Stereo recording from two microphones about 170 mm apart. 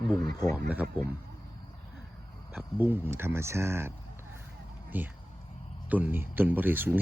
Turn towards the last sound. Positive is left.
turn(degrees=-10)  # may be behind; listen again after turning